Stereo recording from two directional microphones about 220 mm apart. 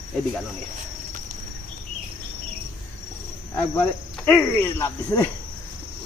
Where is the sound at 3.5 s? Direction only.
10° left (ahead or behind).